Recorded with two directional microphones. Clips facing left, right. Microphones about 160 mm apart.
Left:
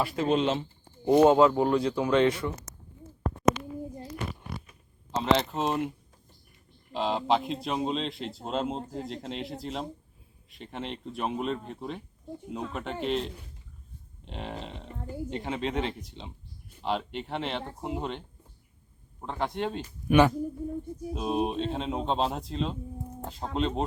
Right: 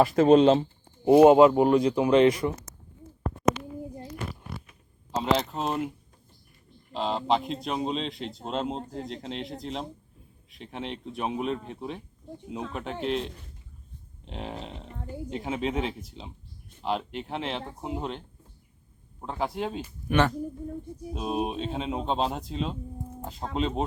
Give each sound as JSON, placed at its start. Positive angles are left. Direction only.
{"t": 0.0, "sound": "speech", "side_deg": -40}
{"t": 1.0, "sound": "speech", "side_deg": -10}
{"t": 5.1, "sound": "speech", "side_deg": 0}
{"t": 6.9, "sound": "speech", "side_deg": 0}
{"t": 19.2, "sound": "speech", "side_deg": 0}
{"t": 20.1, "sound": "speech", "side_deg": 10}
{"t": 21.1, "sound": "speech", "side_deg": 0}